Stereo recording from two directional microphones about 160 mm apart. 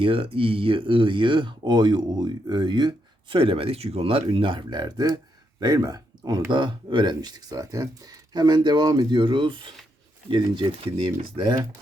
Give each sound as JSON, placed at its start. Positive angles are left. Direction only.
{"t": 0.0, "sound": "speech", "side_deg": -35}